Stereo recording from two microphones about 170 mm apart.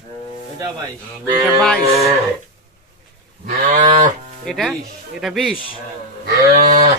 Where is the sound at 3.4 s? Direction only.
50° right (ahead or behind).